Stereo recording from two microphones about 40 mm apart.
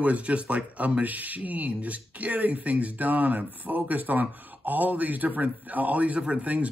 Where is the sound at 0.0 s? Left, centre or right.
Right.